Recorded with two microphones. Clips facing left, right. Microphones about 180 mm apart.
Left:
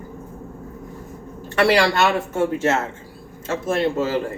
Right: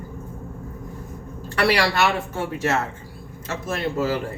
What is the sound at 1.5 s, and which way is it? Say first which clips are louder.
Speech: left 3 dB; 25° left (ahead or behind).